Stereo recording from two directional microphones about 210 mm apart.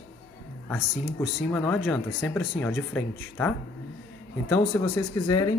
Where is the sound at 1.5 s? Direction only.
5° left (ahead or behind).